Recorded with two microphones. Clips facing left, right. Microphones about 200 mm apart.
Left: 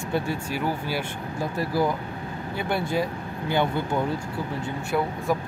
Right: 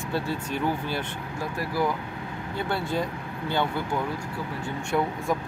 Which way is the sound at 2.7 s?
10° left (ahead or behind).